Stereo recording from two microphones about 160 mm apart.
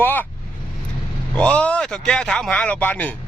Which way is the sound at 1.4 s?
5° left (ahead or behind).